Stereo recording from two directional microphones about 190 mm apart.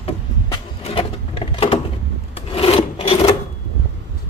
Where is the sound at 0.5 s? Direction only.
30° left (ahead or behind).